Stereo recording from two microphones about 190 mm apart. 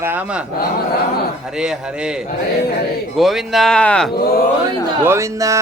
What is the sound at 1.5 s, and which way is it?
Speech, 5° right (ahead or behind).